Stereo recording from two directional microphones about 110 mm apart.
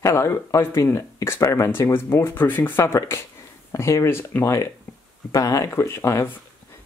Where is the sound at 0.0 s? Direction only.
25° left (ahead or behind).